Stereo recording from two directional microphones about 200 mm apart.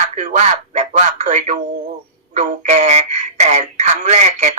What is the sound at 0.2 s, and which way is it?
Speech, 35° right (ahead or behind).